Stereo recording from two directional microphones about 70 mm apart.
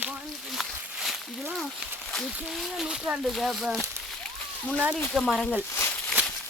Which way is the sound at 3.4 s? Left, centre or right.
Centre.